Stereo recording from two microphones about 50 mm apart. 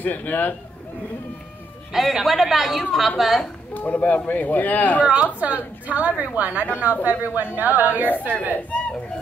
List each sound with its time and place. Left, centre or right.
0.0 s speech: left
1.9 s a woman's voice: centre
3.7 s speech: left
5.0 s a woman's voice: right
8.5 s speech: left